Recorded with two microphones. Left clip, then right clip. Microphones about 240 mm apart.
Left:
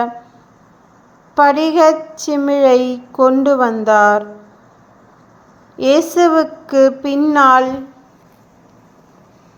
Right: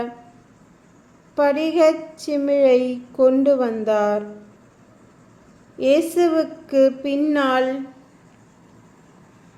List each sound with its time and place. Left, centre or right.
1.4 s speech: centre
5.7 s speech: centre